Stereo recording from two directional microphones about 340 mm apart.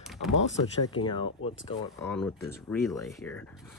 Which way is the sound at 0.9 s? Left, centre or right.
Centre.